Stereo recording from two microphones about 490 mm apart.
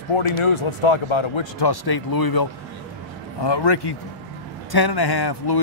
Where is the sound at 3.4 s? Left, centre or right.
Left.